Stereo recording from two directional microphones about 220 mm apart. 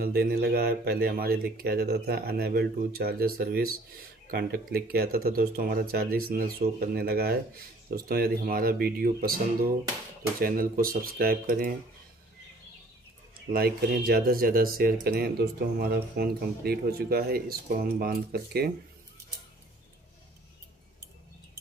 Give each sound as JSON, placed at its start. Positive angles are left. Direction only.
{"t": 0.0, "sound": "speech", "side_deg": -45}
{"t": 13.5, "sound": "speech", "side_deg": -45}